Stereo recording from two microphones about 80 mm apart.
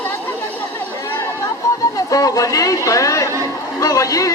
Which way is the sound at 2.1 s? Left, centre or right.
Left.